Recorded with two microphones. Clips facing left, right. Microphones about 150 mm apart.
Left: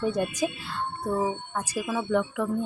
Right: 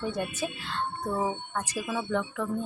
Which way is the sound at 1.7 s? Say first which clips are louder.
Left 5 dB; 10° left (ahead or behind).